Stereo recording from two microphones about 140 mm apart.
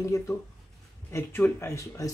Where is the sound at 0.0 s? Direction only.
20° left (ahead or behind).